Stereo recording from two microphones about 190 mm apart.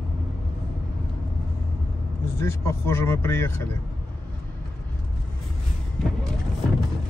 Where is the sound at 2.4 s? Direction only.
15° left (ahead or behind).